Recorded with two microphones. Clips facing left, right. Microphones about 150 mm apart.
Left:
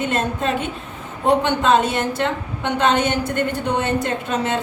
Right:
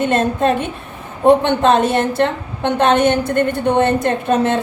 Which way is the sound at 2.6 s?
55° right (ahead or behind).